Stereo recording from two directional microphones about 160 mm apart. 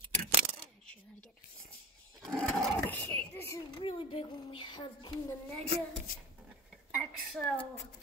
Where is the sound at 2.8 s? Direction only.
15° left (ahead or behind).